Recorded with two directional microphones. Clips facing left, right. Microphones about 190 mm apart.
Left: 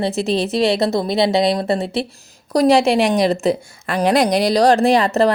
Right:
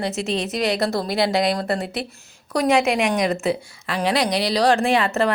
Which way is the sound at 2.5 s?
35° left (ahead or behind).